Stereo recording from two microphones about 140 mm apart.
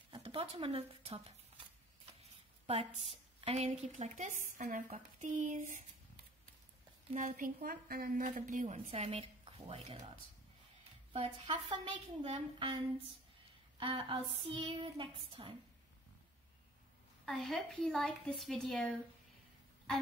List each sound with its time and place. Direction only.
0.1 s speech: 40° right (ahead or behind)
2.6 s a woman's voice: 45° right (ahead or behind); by 5.8 s 60° right (ahead or behind)
7.2 s a woman's voice: 70° right (ahead or behind)
7.6 s a woman's voice: 90° right; by 8.7 s 65° right (ahead or behind)
8.7 s a woman's voice: 45° right (ahead or behind)
13.7 s child singing: 40° right (ahead or behind)
17.3 s a woman's voice: centre (ahead or behind)